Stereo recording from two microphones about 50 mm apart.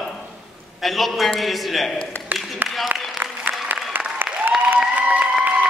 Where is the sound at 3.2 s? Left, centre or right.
Right.